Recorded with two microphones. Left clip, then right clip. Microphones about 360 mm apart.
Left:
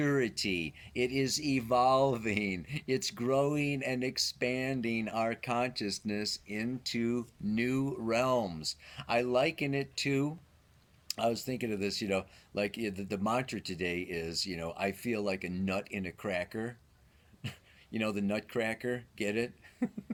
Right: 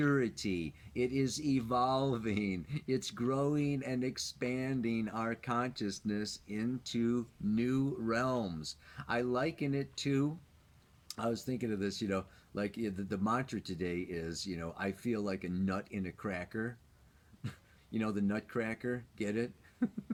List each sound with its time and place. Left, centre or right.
0.1 s speech: centre
7.0 s speech: left
7.5 s speech: centre
17.9 s speech: centre
19.1 s a sound: centre